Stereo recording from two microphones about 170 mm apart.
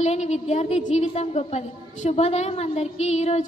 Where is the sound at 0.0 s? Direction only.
40° left (ahead or behind).